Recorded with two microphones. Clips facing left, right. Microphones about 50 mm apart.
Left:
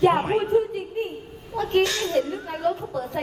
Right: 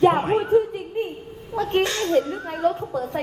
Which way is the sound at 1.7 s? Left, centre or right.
Right.